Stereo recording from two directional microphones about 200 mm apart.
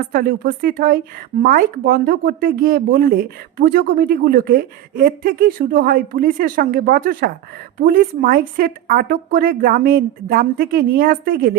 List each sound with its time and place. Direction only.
0.1 s speech: 50° right (ahead or behind)